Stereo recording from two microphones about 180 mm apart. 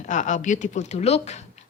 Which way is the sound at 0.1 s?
45° left (ahead or behind).